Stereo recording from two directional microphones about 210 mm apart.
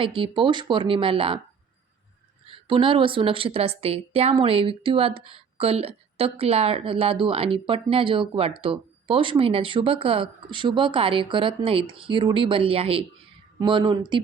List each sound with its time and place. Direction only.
0.0 s speech: 25° right (ahead or behind)
2.5 s speech: 25° right (ahead or behind)